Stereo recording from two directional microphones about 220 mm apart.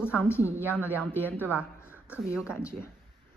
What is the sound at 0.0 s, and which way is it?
A woman's voice, 10° left (ahead or behind).